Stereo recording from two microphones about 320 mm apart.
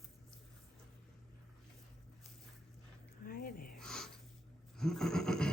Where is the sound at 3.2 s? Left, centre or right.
Left.